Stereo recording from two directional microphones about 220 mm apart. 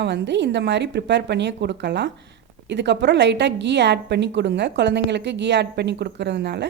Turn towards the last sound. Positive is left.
turn(degrees=-50)  # may be behind; listen again after turning